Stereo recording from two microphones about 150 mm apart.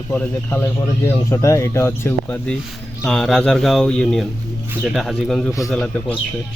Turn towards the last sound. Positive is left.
turn(degrees=5)  # may be behind; listen again after turning